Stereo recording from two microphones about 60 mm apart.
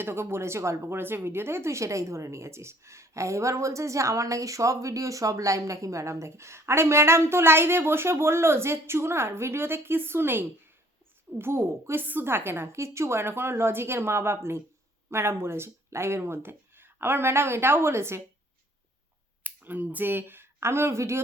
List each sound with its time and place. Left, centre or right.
0.0 s speech: right
0.9 s speech: right
19.4 s speech: right